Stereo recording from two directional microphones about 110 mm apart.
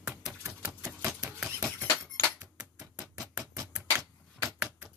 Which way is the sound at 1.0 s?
10° right (ahead or behind).